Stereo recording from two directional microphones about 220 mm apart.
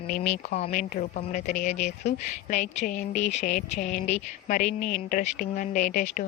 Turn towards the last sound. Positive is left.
turn(degrees=35)  # may be behind; listen again after turning